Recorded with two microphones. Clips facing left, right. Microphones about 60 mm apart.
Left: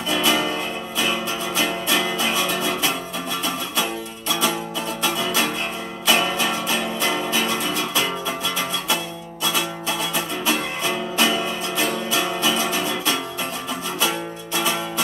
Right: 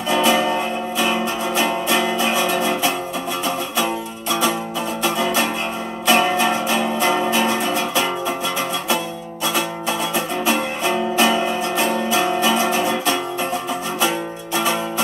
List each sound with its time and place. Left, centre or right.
0.1 s music: right
5.0 s music: right
10.1 s music: right